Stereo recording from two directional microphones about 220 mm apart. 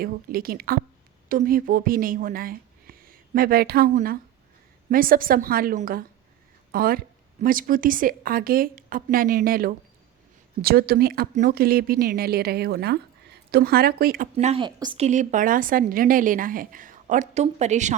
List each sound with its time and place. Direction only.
0.0 s a woman's voice: 40° right (ahead or behind)
14.3 s speech: 30° right (ahead or behind)
15.0 s a woman's voice: 35° right (ahead or behind)